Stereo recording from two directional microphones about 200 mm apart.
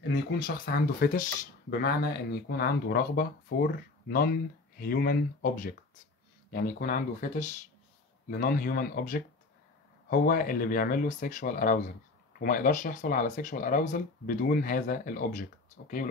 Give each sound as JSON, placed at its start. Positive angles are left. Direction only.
{"t": 0.1, "sound": "speech", "side_deg": 50}